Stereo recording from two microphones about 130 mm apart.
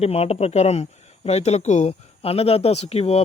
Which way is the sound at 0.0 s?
55° left (ahead or behind).